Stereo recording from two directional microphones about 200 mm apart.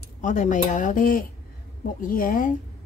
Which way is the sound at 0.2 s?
40° left (ahead or behind).